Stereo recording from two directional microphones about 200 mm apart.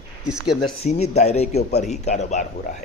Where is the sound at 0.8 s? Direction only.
35° left (ahead or behind).